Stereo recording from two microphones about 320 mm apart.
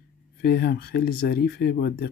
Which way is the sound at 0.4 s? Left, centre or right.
Left.